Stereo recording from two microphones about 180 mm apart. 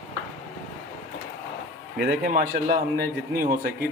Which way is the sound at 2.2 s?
50° right (ahead or behind).